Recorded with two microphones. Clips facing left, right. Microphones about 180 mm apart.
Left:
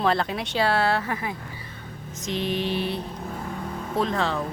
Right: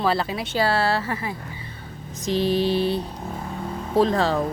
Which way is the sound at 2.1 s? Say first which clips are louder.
Right 6 dB; 35° right (ahead or behind).